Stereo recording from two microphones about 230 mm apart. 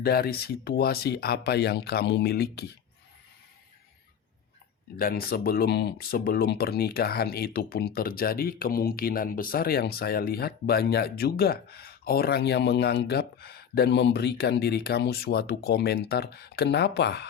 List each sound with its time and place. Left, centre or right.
0.0 s speech: left
4.9 s speech: left